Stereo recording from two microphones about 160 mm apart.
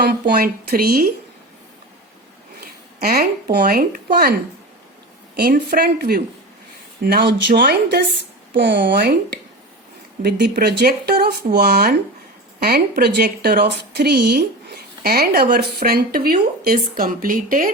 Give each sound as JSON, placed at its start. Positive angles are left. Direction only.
{"t": 0.0, "sound": "a woman's voice", "side_deg": -80}
{"t": 3.0, "sound": "a woman's voice", "side_deg": -70}
{"t": 5.4, "sound": "a woman's voice", "side_deg": -70}
{"t": 7.0, "sound": "a woman's voice", "side_deg": -85}